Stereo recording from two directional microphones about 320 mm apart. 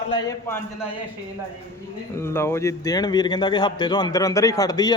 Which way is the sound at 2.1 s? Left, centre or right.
Centre.